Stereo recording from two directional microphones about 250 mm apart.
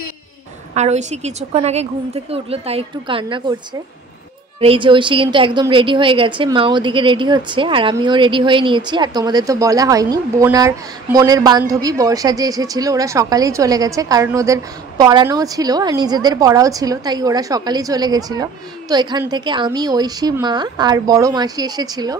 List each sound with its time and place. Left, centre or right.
0.7 s speech: right
4.6 s a woman's voice: right